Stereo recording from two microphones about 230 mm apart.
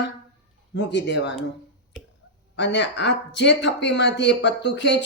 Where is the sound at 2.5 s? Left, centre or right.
Left.